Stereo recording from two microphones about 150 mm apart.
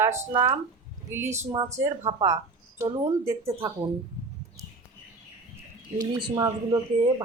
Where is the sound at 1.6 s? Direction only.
20° right (ahead or behind).